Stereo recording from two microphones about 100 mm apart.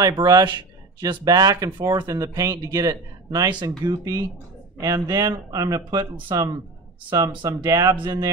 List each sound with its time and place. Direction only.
0.0 s speech: 40° right (ahead or behind)
3.8 s speech: 50° right (ahead or behind)
4.7 s speech: 35° right (ahead or behind)